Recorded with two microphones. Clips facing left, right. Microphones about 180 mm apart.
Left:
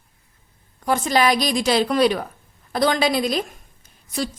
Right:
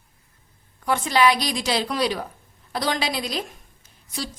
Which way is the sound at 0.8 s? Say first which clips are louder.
Left 1 dB; 40° left (ahead or behind).